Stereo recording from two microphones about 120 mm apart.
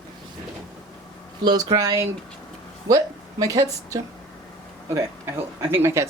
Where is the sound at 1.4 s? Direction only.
35° right (ahead or behind); by 6.0 s 20° right (ahead or behind).